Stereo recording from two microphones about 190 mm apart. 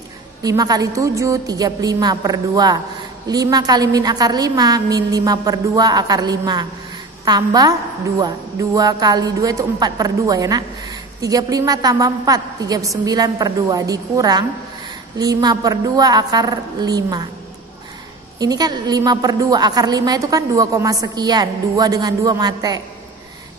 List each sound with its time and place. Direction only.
0.4 s a woman's voice: 20° right (ahead or behind)
18.4 s a woman's voice: 20° right (ahead or behind)